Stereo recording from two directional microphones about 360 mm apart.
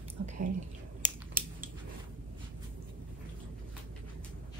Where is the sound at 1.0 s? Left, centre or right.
Right.